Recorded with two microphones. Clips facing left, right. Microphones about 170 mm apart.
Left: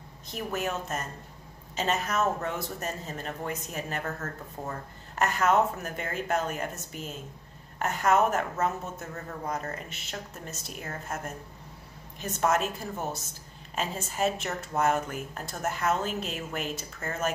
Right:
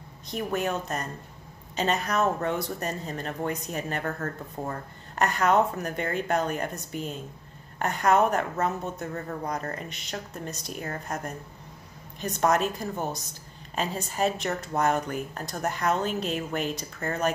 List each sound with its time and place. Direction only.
0.3 s speech: 5° left (ahead or behind)